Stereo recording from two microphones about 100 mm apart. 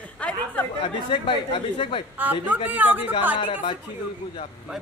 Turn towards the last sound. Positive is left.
turn(degrees=60)  # may be behind; listen again after turning